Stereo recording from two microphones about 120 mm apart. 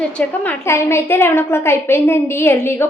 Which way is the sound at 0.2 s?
15° left (ahead or behind).